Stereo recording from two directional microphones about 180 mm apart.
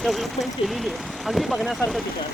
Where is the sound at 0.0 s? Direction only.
Centre (ahead or behind).